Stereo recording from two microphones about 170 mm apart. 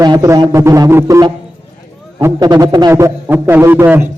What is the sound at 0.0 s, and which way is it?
A man's voice, 20° right (ahead or behind).